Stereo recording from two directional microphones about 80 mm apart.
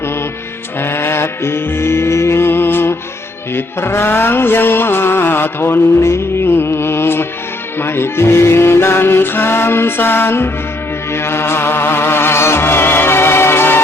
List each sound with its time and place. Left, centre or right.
0.8 s music: left
3.5 s a sound: left
7.8 s music: left